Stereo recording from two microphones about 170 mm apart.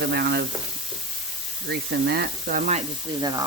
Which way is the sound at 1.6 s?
70° right (ahead or behind).